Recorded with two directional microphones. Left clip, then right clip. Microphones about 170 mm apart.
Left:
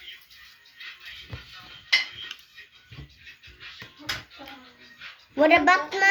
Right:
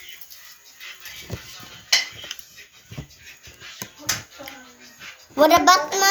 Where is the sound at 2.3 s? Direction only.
40° left (ahead or behind).